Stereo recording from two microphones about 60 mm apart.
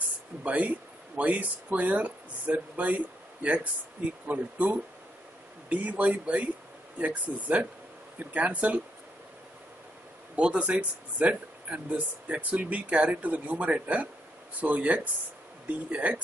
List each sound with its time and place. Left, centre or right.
0.4 s speech: right
4.3 s speech: right
10.3 s speech: right